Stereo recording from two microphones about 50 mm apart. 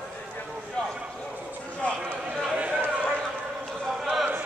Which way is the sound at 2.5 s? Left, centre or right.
Right.